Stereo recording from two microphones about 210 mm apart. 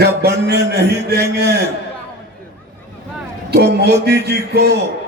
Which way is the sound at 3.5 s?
50° right (ahead or behind).